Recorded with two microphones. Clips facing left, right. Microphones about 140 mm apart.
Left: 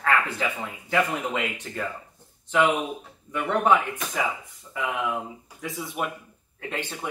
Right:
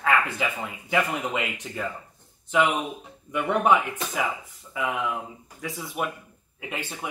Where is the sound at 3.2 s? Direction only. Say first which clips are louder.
Even; 15° right (ahead or behind).